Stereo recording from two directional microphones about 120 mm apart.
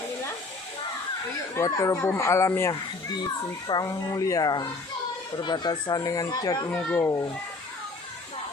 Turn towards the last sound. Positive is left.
turn(degrees=25)  # may be behind; listen again after turning